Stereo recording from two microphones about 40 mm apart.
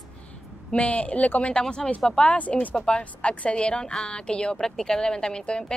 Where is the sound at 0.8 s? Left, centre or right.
Left.